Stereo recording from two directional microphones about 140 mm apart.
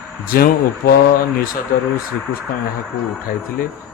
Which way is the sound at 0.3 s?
90° left.